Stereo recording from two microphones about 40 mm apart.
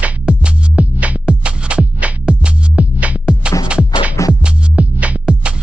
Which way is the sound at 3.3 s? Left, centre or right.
Right.